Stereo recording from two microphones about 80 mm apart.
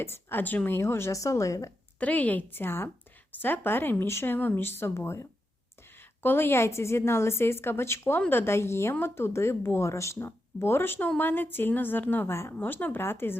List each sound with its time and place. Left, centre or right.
0.0 s speech: left
2.0 s speech: centre